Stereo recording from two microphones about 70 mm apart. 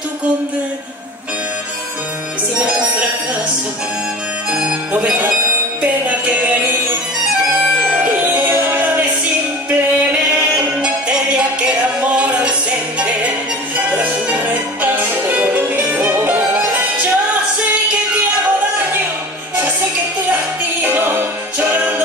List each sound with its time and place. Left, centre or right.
2.5 s music: centre
4.5 s harmonica: centre
5.8 s music: right
7.9 s music: right
10.5 s music: centre
13.9 s music: right
20.8 s music: right